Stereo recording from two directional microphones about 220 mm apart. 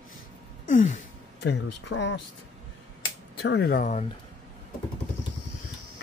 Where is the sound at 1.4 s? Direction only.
55° left (ahead or behind).